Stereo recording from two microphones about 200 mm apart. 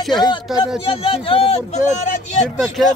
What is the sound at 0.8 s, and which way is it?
A man's voice, 25° left (ahead or behind).